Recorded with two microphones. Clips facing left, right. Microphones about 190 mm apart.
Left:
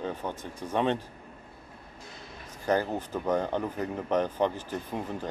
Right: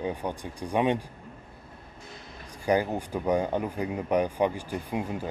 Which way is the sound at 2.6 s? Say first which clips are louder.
Right 2 dB; 10° right (ahead or behind).